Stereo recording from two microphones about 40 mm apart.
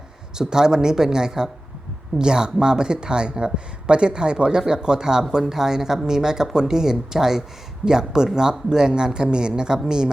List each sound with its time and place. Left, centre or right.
0.3 s speech: centre